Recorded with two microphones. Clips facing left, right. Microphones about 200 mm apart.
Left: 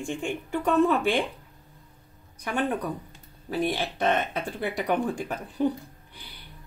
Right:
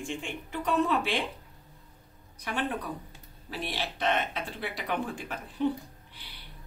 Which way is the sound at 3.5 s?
50° left (ahead or behind).